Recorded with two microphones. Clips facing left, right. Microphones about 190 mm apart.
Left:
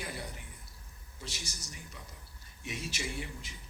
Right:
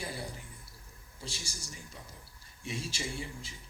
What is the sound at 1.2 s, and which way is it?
Speech, 30° right (ahead or behind).